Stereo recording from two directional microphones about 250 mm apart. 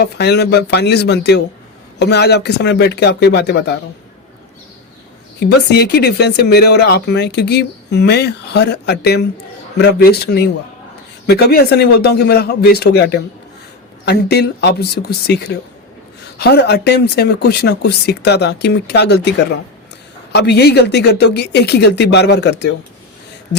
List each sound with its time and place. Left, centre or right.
0.0 s speech: left
5.4 s speech: left
20.3 s speech: left